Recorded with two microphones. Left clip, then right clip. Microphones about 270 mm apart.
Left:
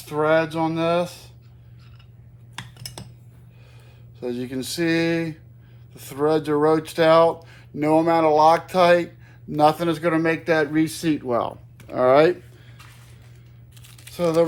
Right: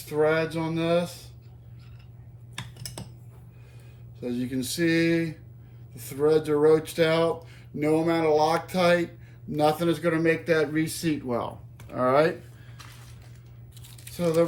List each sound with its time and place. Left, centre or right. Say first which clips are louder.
0.0 s speech: left 4 dB; left
4.2 s speech: left 3 dB; left
13.8 s a sound: left 4 dB; left